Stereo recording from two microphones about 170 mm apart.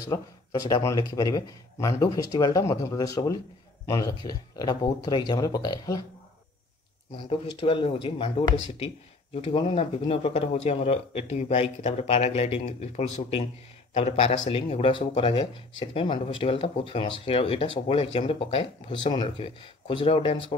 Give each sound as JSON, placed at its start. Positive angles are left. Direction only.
{"t": 0.1, "sound": "speech", "side_deg": 20}
{"t": 7.6, "sound": "speech", "side_deg": 30}